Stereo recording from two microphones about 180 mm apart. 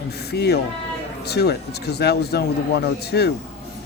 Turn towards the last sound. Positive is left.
turn(degrees=65)  # may be behind; listen again after turning